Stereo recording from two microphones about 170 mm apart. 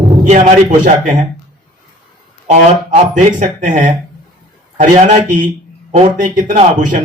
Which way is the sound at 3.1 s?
50° right (ahead or behind).